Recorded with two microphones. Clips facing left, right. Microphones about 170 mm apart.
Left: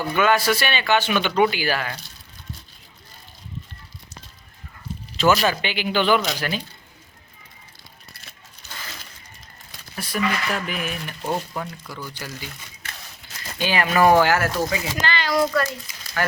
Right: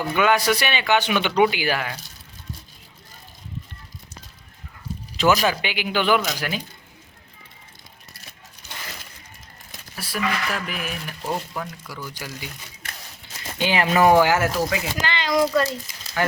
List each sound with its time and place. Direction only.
0.1 s speech: 15° right (ahead or behind)
5.1 s speech: 15° right (ahead or behind)
9.9 s speech: 5° right (ahead or behind)
13.6 s speech: 20° right (ahead or behind)
15.1 s a child's voice: 20° right (ahead or behind)